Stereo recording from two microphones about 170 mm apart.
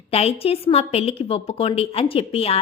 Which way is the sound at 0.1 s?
35° left (ahead or behind).